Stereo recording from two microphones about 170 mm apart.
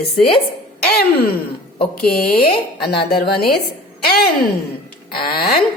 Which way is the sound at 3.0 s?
65° left (ahead or behind).